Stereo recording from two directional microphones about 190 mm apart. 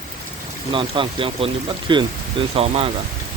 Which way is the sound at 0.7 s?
25° right (ahead or behind).